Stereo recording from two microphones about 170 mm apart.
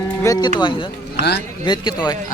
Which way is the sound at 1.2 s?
75° left (ahead or behind).